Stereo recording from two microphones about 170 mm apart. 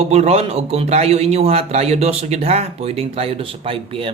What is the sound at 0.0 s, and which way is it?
Speech, 40° right (ahead or behind).